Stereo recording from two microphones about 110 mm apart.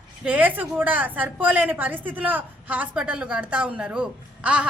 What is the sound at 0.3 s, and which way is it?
A woman's voice, 15° right (ahead or behind).